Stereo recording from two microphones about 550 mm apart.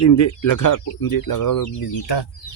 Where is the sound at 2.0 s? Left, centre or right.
Left.